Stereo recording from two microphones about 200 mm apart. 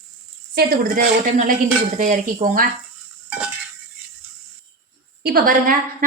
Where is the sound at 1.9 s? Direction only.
40° right (ahead or behind).